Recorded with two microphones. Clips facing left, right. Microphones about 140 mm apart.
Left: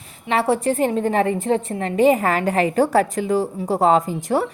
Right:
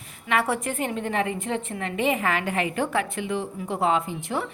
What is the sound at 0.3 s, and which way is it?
A woman's voice, 30° left (ahead or behind).